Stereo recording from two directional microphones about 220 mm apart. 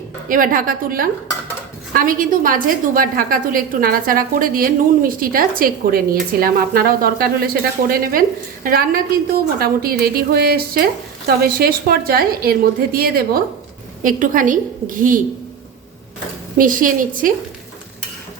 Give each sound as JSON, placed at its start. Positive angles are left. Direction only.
{"t": 0.3, "sound": "a woman's voice", "side_deg": -40}
{"t": 16.6, "sound": "a woman's voice", "side_deg": -40}